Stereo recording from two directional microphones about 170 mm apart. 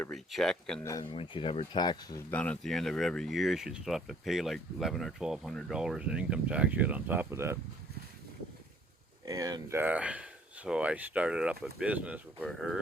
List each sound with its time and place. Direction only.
0.0 s speech: centre (ahead or behind)
0.8 s speech: 20° left (ahead or behind)
1.0 s speech: 35° left (ahead or behind)
2.3 s speech: 5° left (ahead or behind); by 7.6 s 15° right (ahead or behind)
9.2 s speech: 20° right (ahead or behind); by 12.8 s centre (ahead or behind)